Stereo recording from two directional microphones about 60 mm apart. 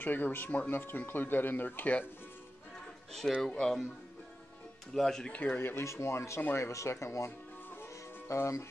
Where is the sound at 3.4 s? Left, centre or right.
Centre.